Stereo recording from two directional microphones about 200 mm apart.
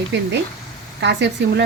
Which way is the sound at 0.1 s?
60° right (ahead or behind).